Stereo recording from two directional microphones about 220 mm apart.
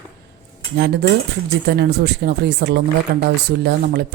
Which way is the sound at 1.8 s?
50° right (ahead or behind).